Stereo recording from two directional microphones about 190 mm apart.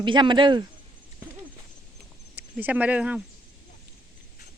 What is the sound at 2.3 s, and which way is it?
Speech, 10° right (ahead or behind).